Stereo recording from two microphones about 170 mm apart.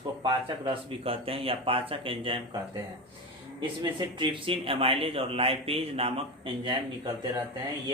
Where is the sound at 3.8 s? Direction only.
30° right (ahead or behind).